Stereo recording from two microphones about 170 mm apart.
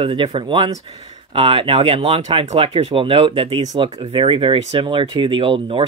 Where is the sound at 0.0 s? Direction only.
30° right (ahead or behind).